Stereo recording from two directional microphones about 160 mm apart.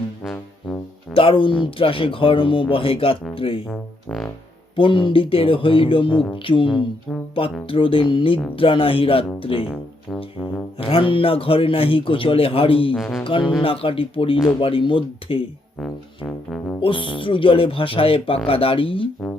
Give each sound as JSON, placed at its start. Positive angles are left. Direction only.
{"t": 0.2, "sound": "brass instrument", "side_deg": 5}
{"t": 1.1, "sound": "speech", "side_deg": 35}
{"t": 3.7, "sound": "music", "side_deg": 0}
{"t": 4.8, "sound": "speech", "side_deg": 30}
{"t": 10.8, "sound": "speech", "side_deg": 35}
{"t": 12.9, "sound": "music", "side_deg": 0}
{"t": 13.2, "sound": "speech", "side_deg": 35}
{"t": 15.8, "sound": "music", "side_deg": 5}
{"t": 16.8, "sound": "speech", "side_deg": 35}